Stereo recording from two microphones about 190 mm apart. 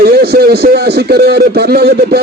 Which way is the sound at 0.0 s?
55° right (ahead or behind).